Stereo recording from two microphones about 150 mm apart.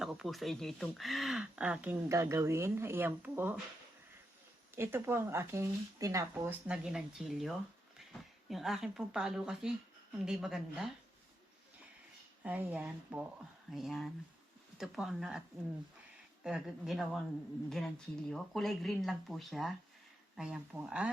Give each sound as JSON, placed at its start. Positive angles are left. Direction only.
{"t": 0.0, "sound": "speech", "side_deg": 0}
{"t": 4.7, "sound": "speech", "side_deg": -15}
{"t": 12.4, "sound": "speech", "side_deg": -10}